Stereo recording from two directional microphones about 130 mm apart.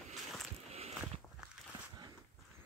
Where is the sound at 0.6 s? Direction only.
55° right (ahead or behind).